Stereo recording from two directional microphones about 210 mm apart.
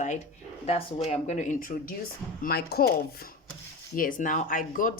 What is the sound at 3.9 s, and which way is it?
Speech, 40° left (ahead or behind).